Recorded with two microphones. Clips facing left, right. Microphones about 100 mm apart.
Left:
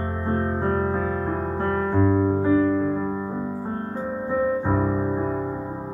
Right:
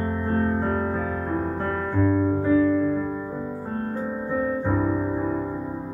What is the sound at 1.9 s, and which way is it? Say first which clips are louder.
Music: even; 20° left (ahead or behind).